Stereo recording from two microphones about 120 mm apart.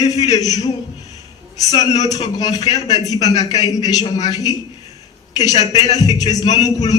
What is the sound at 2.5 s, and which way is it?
Music, 30° left (ahead or behind).